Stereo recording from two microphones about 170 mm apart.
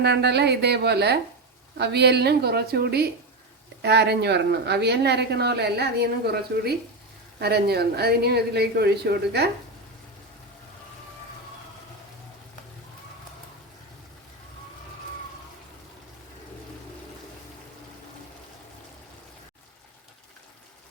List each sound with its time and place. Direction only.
0.0 s speech: 80° right